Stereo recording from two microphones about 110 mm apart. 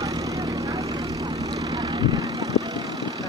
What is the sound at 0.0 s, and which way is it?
Vehicle, 30° right (ahead or behind).